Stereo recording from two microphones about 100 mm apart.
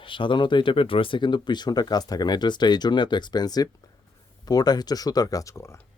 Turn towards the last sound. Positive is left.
turn(degrees=30)  # may be behind; listen again after turning